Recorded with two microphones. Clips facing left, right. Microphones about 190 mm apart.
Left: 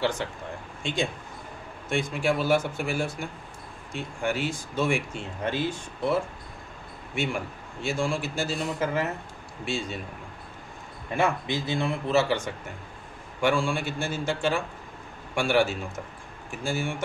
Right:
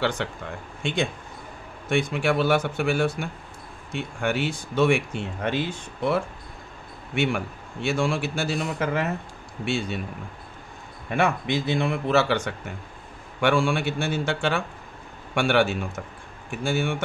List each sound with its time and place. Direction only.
1.9 s speech: 70° right (ahead or behind)
11.1 s speech: 70° right (ahead or behind)